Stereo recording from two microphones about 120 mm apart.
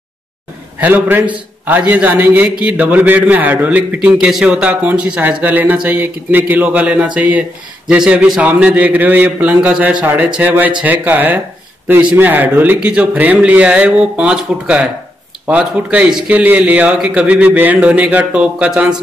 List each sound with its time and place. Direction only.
0.7 s a man's voice: 15° right (ahead or behind)